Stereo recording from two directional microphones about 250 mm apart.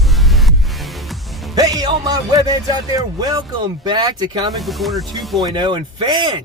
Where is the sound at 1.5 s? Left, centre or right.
Centre.